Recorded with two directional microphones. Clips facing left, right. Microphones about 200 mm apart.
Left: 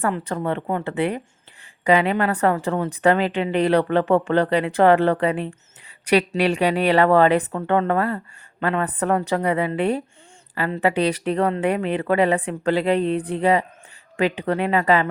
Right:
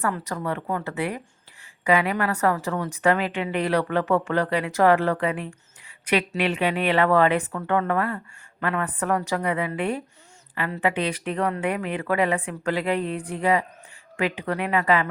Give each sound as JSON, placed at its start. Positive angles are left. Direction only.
{"t": 0.0, "sound": "a woman's voice", "side_deg": 30}